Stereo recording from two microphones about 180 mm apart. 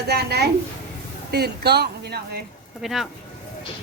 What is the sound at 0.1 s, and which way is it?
A woman's voice, 65° right (ahead or behind).